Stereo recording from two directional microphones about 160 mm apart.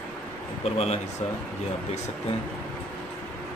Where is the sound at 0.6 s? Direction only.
40° left (ahead or behind).